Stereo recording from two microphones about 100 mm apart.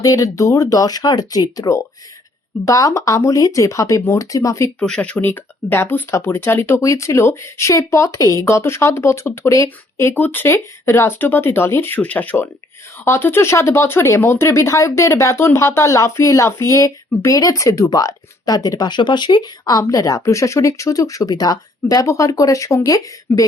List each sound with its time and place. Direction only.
0.0 s speech: 35° left (ahead or behind)
4.8 s speech: 10° left (ahead or behind); by 23.5 s 35° left (ahead or behind)